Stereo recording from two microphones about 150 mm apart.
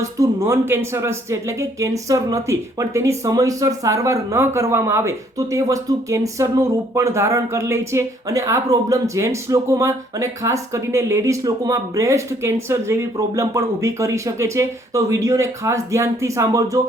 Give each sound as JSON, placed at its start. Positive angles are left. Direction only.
{"t": 0.2, "sound": "speech", "side_deg": -20}